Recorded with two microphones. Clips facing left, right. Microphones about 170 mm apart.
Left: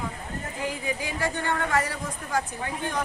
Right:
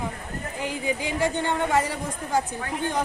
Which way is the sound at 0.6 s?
25° right (ahead or behind).